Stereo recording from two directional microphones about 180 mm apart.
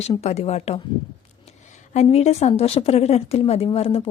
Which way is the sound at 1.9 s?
35° left (ahead or behind).